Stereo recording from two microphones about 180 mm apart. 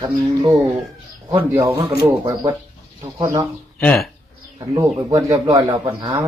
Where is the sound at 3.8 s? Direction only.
5° left (ahead or behind).